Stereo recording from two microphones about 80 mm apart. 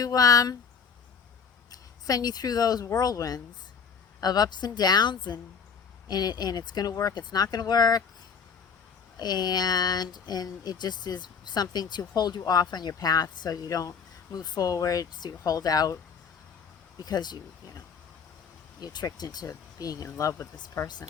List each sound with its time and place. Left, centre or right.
0.0 s speech: left
1.7 s speech: left
9.1 s speech: left
17.0 s speech: left
18.8 s speech: left
20.8 s speech: left